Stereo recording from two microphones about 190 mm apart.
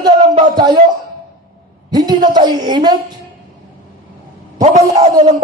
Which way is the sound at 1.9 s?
20° right (ahead or behind).